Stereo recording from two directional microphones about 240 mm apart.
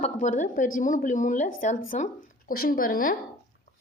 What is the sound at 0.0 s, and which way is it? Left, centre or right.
A woman's voice, left.